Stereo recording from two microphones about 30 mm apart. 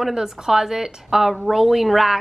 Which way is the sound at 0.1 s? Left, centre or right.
Centre.